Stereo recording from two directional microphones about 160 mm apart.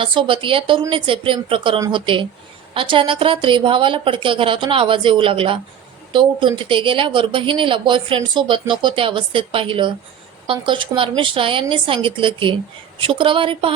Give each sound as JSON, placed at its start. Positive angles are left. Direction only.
{"t": 0.0, "sound": "a woman's voice", "side_deg": -35}